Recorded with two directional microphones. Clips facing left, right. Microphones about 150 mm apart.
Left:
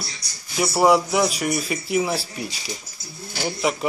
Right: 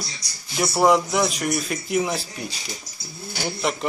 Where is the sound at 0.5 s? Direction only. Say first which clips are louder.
Left 1 dB; centre (ahead or behind).